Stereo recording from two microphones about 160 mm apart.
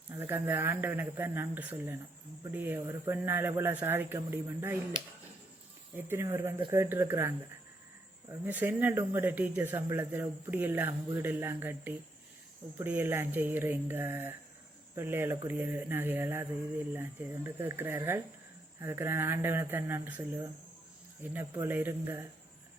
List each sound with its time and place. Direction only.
0.1 s speech: 15° right (ahead or behind)
6.0 s speech: 15° right (ahead or behind)
8.4 s speech: 10° right (ahead or behind)